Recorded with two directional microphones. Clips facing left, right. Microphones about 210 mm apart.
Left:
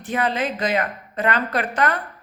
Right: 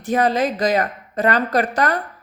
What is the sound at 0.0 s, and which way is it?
Speech, 40° right (ahead or behind).